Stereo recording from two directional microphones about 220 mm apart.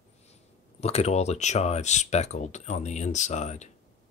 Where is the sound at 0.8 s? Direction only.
30° left (ahead or behind).